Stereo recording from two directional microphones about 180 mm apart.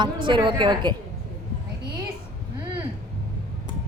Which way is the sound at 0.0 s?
25° right (ahead or behind).